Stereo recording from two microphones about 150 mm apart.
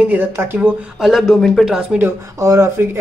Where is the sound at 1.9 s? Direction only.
15° right (ahead or behind).